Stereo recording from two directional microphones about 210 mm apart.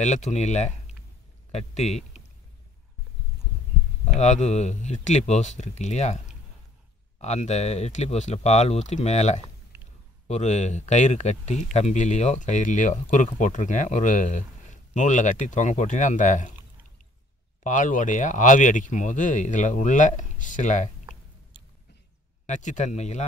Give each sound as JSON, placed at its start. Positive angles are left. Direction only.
{"t": 0.0, "sound": "speech", "side_deg": 35}
{"t": 4.1, "sound": "speech", "side_deg": 35}
{"t": 9.7, "sound": "a sound", "side_deg": -10}
{"t": 10.2, "sound": "speech", "side_deg": 35}
{"t": 17.6, "sound": "speech", "side_deg": 40}
{"t": 22.5, "sound": "speech", "side_deg": 35}